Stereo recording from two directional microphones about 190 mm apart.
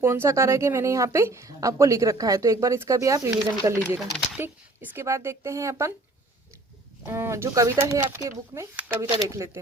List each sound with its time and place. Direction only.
0.0 s a woman's voice: 10° right (ahead or behind)
7.0 s a woman's voice: 15° right (ahead or behind)